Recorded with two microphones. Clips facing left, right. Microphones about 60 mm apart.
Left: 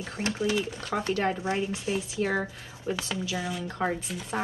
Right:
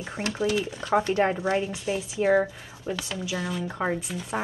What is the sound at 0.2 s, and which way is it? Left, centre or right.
Speech, right.